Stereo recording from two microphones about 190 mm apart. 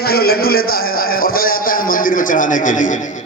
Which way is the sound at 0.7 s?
50° left (ahead or behind).